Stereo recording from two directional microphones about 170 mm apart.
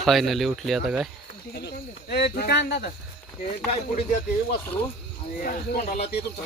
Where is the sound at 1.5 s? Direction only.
70° left (ahead or behind).